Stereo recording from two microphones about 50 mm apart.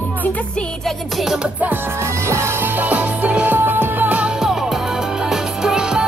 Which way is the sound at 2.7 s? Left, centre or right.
Right.